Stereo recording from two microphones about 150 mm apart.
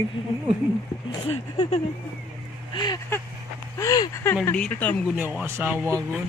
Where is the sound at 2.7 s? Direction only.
30° left (ahead or behind).